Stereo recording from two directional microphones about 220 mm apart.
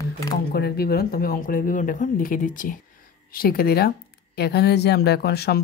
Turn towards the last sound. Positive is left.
turn(degrees=45)  # may be behind; listen again after turning